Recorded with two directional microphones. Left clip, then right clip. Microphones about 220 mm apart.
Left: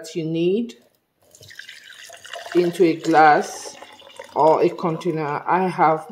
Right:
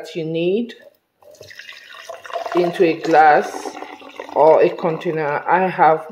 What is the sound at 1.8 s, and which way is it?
Water, 30° right (ahead or behind).